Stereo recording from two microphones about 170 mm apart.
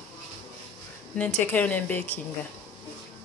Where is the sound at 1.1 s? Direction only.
10° left (ahead or behind).